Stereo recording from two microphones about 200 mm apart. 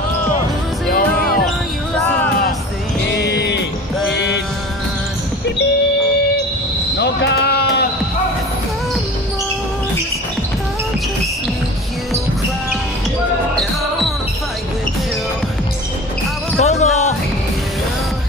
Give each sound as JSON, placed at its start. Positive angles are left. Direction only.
{"t": 3.2, "sound": "music", "side_deg": 55}
{"t": 7.0, "sound": "sheep", "side_deg": 60}
{"t": 16.5, "sound": "music", "side_deg": 35}